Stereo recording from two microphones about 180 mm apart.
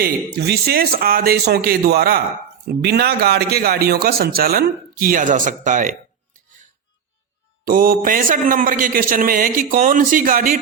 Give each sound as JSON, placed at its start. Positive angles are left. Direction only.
{"t": 0.0, "sound": "speech", "side_deg": -60}
{"t": 7.6, "sound": "a man's voice", "side_deg": -50}